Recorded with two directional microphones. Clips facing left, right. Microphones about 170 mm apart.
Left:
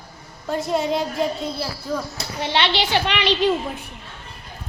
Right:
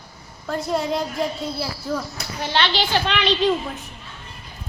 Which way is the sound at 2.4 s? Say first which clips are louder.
Left 1 dB; 25° left (ahead or behind).